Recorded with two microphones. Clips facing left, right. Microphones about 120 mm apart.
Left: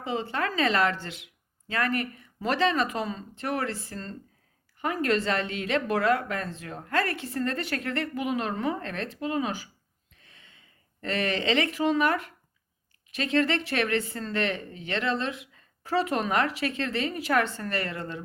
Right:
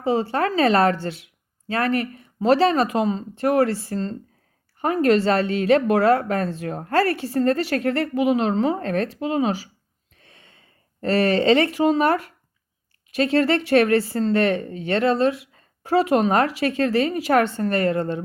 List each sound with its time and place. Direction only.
0.0 s speech: 35° right (ahead or behind)